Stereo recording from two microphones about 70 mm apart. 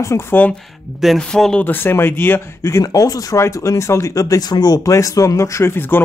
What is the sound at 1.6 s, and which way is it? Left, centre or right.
Speech, left.